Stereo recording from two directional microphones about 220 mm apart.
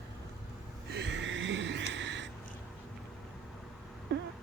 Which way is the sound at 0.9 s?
50° right (ahead or behind).